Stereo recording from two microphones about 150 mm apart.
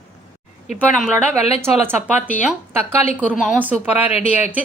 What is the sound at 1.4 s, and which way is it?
Speech, 45° left (ahead or behind).